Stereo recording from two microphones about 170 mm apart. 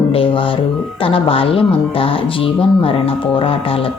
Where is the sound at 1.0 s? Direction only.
35° left (ahead or behind).